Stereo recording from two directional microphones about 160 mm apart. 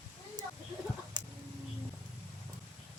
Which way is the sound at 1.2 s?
25° right (ahead or behind).